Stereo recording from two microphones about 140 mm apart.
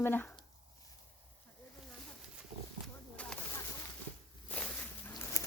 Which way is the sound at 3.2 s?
10° left (ahead or behind).